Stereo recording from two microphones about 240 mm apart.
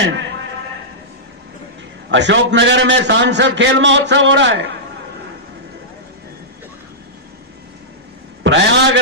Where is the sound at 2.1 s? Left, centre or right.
Right.